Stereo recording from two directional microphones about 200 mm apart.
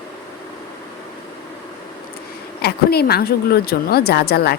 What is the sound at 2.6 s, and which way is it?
Speech, 55° left (ahead or behind).